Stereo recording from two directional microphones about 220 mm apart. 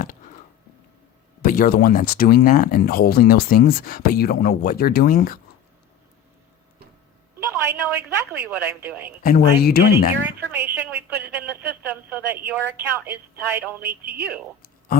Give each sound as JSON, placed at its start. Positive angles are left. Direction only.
{"t": 1.4, "sound": "speech", "side_deg": 40}
{"t": 7.3, "sound": "a woman's voice", "side_deg": -10}
{"t": 9.2, "sound": "speech", "side_deg": 45}
{"t": 10.2, "sound": "a woman's voice", "side_deg": -10}